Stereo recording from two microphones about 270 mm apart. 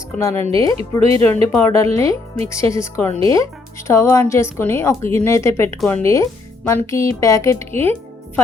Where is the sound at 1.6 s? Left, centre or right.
Centre.